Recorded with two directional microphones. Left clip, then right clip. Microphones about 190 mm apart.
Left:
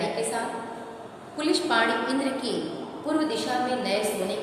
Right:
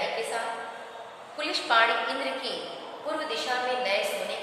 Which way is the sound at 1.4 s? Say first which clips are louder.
Even; 10° left (ahead or behind).